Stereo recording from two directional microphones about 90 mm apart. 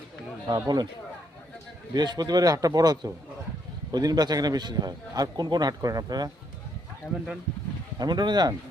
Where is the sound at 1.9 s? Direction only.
50° right (ahead or behind).